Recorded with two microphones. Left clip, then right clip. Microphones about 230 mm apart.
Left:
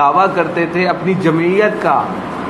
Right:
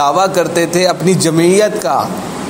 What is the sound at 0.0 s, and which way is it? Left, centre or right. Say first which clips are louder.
A man's voice: even; right.